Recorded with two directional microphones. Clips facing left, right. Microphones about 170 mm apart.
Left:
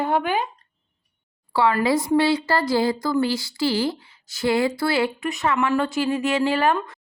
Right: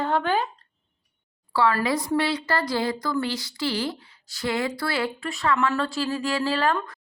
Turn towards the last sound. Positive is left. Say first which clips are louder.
# left 4 dB
turn(degrees=20)  # may be behind; listen again after turning